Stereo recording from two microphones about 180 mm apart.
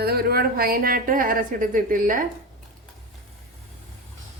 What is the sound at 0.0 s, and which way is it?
A woman's voice, 60° right (ahead or behind).